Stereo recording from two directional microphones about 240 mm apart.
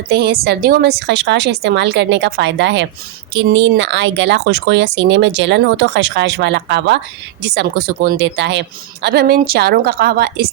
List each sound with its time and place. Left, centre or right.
0.1 s speech: right